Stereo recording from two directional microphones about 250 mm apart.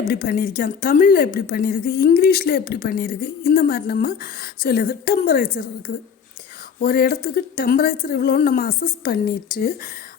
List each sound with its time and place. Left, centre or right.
0.1 s a woman's voice: left
6.7 s a woman's voice: left